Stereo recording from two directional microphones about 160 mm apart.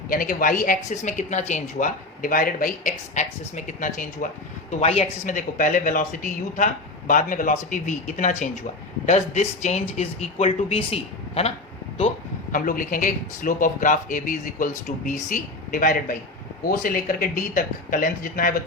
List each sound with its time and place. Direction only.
0.1 s a man's voice: 60° left (ahead or behind)
2.9 s speech: 50° left (ahead or behind)
4.7 s speech: 40° left (ahead or behind)
12.5 s a man's voice: 60° left (ahead or behind)